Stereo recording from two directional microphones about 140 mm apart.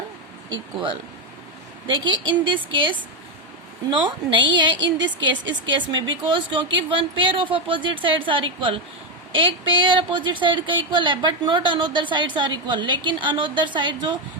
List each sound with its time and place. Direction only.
1.9 s a woman's voice: 35° right (ahead or behind)